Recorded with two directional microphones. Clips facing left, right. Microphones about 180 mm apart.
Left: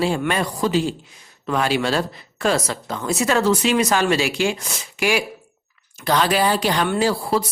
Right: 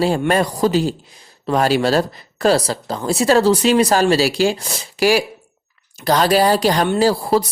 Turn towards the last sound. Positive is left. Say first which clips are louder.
# right 4 dB
turn(degrees=-40)  # may be behind; listen again after turning